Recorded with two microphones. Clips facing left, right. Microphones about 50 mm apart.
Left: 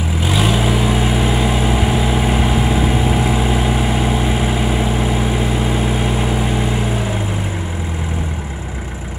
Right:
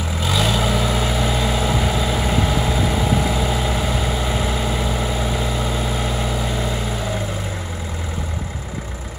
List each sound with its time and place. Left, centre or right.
0.2 s vehicle: left